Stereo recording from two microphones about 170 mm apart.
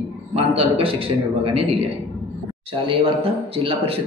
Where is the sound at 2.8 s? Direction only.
30° right (ahead or behind).